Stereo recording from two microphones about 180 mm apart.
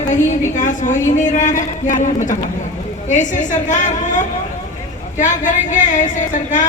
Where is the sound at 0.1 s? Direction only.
45° left (ahead or behind).